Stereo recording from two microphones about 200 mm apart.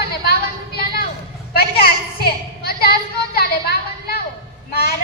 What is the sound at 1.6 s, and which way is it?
A woman's voice, 50° left (ahead or behind).